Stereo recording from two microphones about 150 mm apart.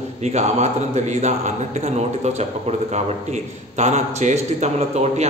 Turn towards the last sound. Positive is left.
turn(degrees=-45)  # may be behind; listen again after turning